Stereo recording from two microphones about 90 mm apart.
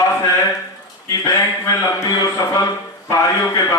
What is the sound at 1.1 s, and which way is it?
A man's voice, 40° left (ahead or behind).